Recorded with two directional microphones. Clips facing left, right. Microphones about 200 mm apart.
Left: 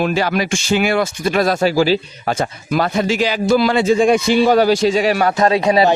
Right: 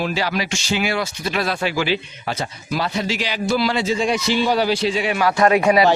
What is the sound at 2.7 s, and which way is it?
Speech, 50° left (ahead or behind).